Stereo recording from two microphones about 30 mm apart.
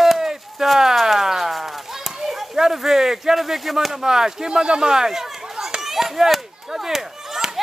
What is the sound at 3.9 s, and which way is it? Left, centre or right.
Speech, centre.